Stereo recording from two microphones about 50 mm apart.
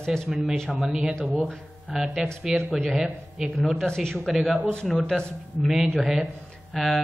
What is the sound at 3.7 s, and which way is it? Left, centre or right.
Speech, centre.